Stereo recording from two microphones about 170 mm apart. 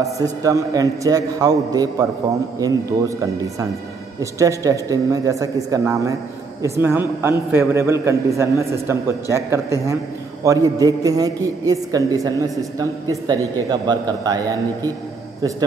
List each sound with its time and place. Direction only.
0.2 s a man's voice: 20° right (ahead or behind)